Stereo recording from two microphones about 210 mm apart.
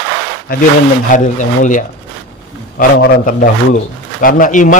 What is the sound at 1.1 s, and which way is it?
Speech, 35° left (ahead or behind).